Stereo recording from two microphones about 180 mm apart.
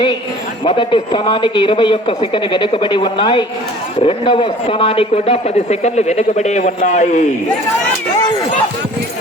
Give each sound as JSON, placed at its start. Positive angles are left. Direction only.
{"t": 0.6, "sound": "a man's voice", "side_deg": 25}